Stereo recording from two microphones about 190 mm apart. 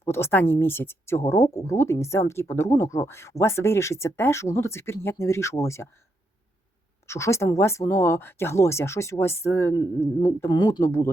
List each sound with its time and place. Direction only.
0.0 s speech: 15° left (ahead or behind)
7.1 s speech: 15° left (ahead or behind)